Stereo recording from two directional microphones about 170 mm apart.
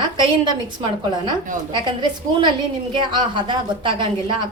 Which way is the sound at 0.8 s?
30° right (ahead or behind).